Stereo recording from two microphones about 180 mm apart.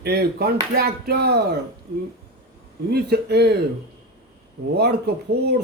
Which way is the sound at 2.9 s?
60° right (ahead or behind).